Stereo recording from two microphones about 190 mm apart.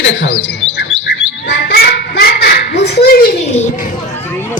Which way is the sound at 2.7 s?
60° left (ahead or behind).